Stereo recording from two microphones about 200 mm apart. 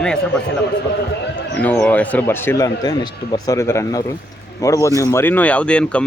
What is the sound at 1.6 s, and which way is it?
Speech, 5° left (ahead or behind).